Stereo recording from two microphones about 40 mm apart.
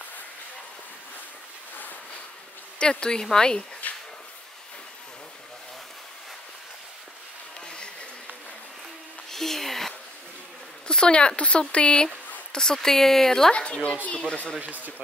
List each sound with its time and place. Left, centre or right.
2.8 s speech: left
3.8 s a sound: left
7.6 s a sound: left
9.3 s music: centre
10.9 s speech: left
12.5 s speech: centre
13.5 s speech: left
14.6 s speech: right